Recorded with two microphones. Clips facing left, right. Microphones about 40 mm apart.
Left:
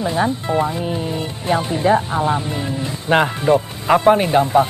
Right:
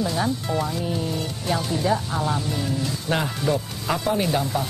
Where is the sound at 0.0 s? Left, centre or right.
Left.